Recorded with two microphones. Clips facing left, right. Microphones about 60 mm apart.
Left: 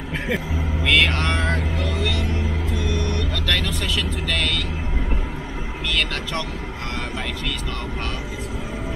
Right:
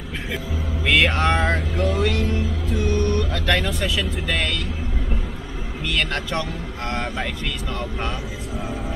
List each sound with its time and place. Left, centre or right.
0.8 s speech: centre
2.9 s speech: right
3.9 s speech: centre